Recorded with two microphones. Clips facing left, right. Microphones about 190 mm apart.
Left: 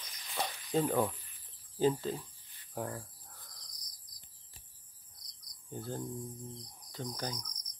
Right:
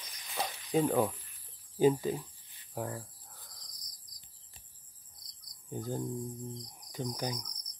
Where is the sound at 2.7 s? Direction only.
Centre (ahead or behind).